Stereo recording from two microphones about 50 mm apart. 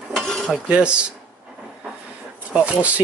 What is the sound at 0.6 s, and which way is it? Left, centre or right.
Dishes, right.